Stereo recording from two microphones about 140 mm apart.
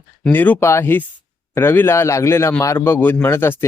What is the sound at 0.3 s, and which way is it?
A man's voice, 10° left (ahead or behind).